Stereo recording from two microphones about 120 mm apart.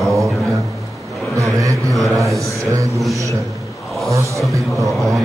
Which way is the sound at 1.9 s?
Centre (ahead or behind).